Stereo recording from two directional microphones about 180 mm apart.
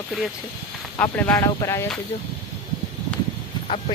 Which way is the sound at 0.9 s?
10° left (ahead or behind).